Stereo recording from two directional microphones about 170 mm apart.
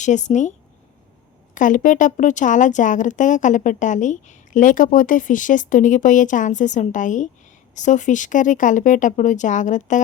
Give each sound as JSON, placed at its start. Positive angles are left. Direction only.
{"t": 0.0, "sound": "a woman's voice", "side_deg": 45}
{"t": 1.5, "sound": "a woman's voice", "side_deg": 50}